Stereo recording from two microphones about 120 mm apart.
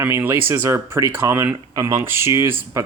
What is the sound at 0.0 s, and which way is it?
Speech, 20° right (ahead or behind).